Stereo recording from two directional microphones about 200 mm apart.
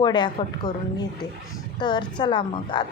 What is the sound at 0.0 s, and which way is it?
A woman's voice, 20° left (ahead or behind).